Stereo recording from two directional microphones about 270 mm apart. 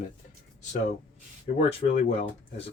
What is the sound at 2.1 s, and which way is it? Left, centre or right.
Speech, left.